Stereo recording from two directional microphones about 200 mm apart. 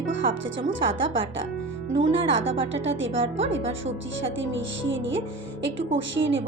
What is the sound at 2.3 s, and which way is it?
Speech, 70° right (ahead or behind).